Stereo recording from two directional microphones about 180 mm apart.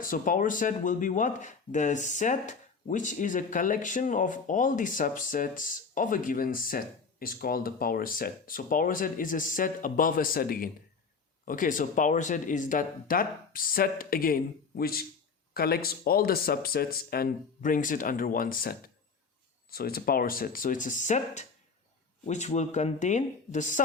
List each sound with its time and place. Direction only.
0.0 s speech: 50° left (ahead or behind)